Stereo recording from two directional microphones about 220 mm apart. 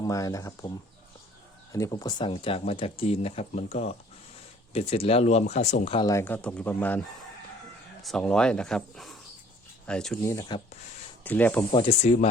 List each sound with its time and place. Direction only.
0.0 s speech: 15° left (ahead or behind)
1.7 s speech: 15° left (ahead or behind)
6.1 s speech: 10° left (ahead or behind)
8.0 s speech: 5° left (ahead or behind)
11.7 s speech: 25° left (ahead or behind)